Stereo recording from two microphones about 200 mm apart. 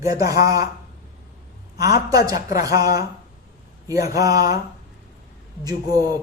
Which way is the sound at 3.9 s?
15° right (ahead or behind).